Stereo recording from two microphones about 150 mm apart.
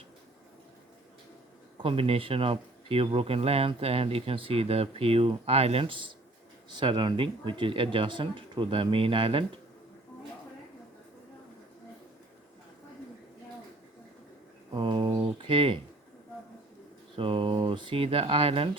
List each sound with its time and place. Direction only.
1.8 s speech: 40° right (ahead or behind)
14.7 s a sound: 35° right (ahead or behind)
17.2 s speech: 35° right (ahead or behind)